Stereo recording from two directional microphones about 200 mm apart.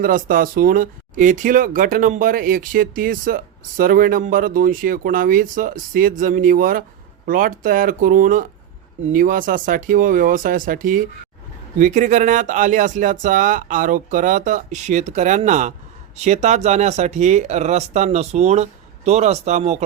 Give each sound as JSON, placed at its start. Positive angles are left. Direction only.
{"t": 0.0, "sound": "speech", "side_deg": -45}